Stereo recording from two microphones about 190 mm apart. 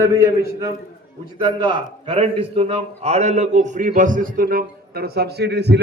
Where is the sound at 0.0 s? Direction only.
15° right (ahead or behind).